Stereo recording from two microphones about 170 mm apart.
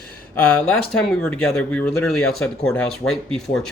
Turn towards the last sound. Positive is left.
turn(degrees=5)  # may be behind; listen again after turning